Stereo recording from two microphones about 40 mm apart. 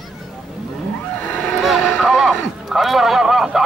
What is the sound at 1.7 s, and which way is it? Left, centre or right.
Vehicle, centre.